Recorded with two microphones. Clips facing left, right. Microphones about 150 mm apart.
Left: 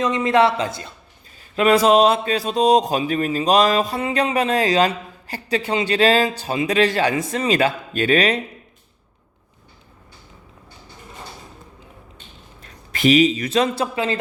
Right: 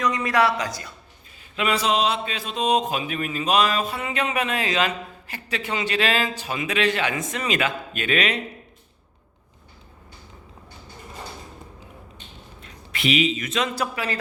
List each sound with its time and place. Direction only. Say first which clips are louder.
0.0 s speech: left 5 dB; 25° left (ahead or behind)
1.5 s speech: left 8 dB; 45° left (ahead or behind)
12.6 s a man's voice: left 8 dB; 40° left (ahead or behind); by 14.2 s 25° left (ahead or behind)